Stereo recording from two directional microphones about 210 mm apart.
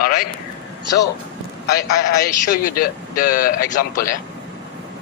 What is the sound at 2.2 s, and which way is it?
A man's voice, 45° left (ahead or behind).